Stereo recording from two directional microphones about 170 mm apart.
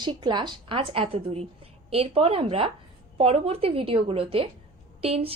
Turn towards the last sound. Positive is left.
turn(degrees=-35)  # may be behind; listen again after turning